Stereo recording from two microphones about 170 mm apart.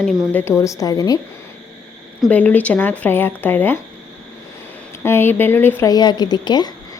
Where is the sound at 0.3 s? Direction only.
15° left (ahead or behind).